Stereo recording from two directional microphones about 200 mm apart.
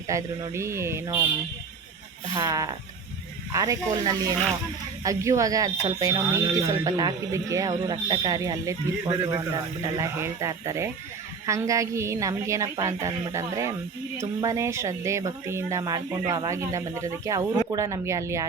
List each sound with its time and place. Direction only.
0.1 s speech: 15° right (ahead or behind)
2.3 s speech: 20° right (ahead or behind)